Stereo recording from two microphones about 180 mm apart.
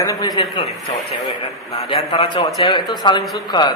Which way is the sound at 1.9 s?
35° left (ahead or behind).